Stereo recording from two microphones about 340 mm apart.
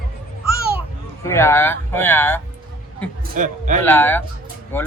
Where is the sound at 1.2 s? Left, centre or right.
Centre.